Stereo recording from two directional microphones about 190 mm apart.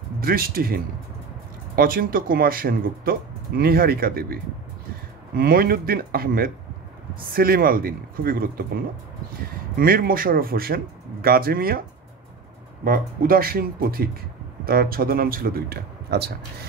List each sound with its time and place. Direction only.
0.2 s speech: 50° right (ahead or behind)
1.8 s speech: 50° right (ahead or behind)
9.8 s speech: 50° right (ahead or behind)
12.8 s speech: 50° right (ahead or behind)